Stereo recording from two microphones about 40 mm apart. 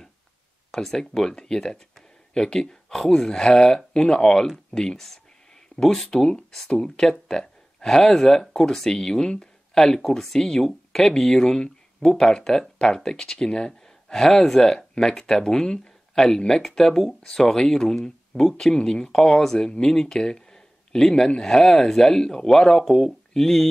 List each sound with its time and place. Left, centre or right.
0.7 s speech: centre
11.4 s a sound: centre
12.1 s speech: centre
19.0 s speech: centre
19.9 s a sound: centre
21.4 s speech: centre